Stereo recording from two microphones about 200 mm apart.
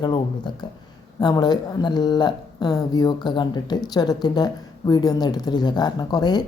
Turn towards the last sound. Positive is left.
turn(degrees=20)  # may be behind; listen again after turning